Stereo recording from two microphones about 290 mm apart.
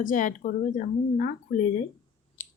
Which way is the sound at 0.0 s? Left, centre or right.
Left.